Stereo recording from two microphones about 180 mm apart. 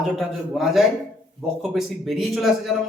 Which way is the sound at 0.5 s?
Centre (ahead or behind).